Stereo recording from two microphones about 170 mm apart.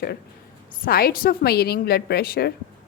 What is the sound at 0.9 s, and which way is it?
A woman's voice, 60° left (ahead or behind).